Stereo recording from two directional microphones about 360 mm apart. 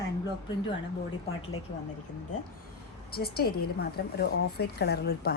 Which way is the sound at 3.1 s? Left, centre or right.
Left.